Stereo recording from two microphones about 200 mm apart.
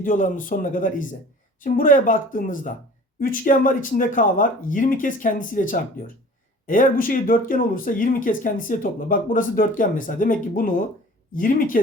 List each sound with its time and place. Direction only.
0.0 s speech: 40° left (ahead or behind)